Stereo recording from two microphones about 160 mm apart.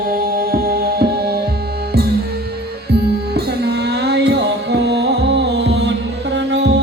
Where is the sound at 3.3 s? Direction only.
90° right.